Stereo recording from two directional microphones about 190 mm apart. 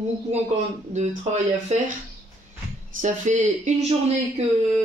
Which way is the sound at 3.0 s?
40° right (ahead or behind).